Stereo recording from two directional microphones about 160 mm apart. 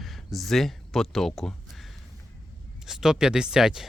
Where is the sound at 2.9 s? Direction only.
5° right (ahead or behind).